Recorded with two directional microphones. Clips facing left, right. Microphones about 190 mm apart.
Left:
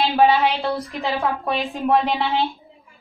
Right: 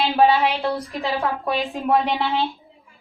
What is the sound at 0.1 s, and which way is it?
A woman's voice, centre (ahead or behind).